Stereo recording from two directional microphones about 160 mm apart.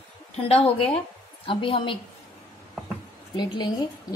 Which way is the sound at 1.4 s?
35° left (ahead or behind).